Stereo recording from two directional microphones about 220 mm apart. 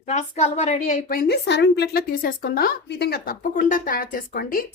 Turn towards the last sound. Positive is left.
turn(degrees=40)  # may be behind; listen again after turning